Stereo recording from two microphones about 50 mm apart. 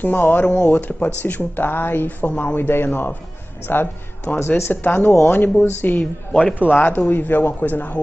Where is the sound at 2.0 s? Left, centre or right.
Left.